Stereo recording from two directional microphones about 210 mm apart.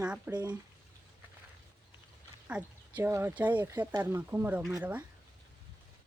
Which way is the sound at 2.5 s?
5° right (ahead or behind).